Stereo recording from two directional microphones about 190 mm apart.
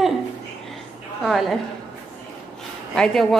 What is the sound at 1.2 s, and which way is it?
Speech, centre (ahead or behind).